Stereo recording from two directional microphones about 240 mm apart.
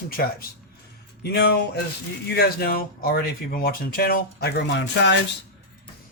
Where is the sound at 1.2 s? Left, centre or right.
Left.